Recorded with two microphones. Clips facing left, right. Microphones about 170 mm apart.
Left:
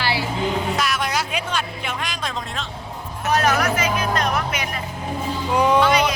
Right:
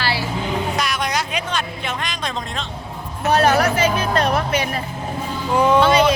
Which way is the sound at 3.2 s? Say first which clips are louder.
Right 4 dB; 30° right (ahead or behind).